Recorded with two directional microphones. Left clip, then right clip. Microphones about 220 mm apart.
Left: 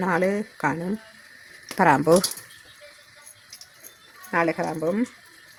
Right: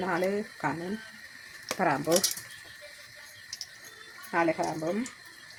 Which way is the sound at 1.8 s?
50° left (ahead or behind).